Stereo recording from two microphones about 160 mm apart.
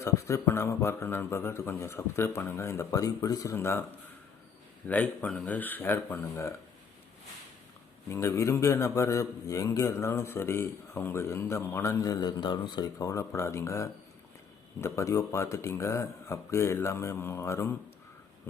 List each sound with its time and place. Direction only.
0.0 s a man's voice: 20° left (ahead or behind)
4.9 s a man's voice: 10° left (ahead or behind)
8.1 s a man's voice: 15° left (ahead or behind)